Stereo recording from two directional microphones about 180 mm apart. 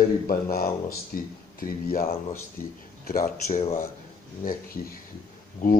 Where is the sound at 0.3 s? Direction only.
55° left (ahead or behind).